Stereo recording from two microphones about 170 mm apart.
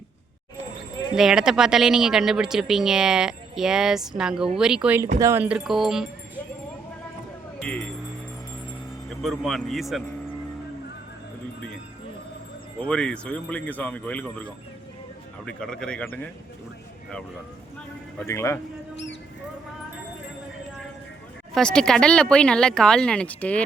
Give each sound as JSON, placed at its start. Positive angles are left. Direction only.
{"t": 1.1, "sound": "speech", "side_deg": -5}
{"t": 7.6, "sound": "speech", "side_deg": 5}
{"t": 9.0, "sound": "speech", "side_deg": 0}
{"t": 12.8, "sound": "a man's voice", "side_deg": 5}
{"t": 18.3, "sound": "a man's voice", "side_deg": 15}
{"t": 21.5, "sound": "speech", "side_deg": 5}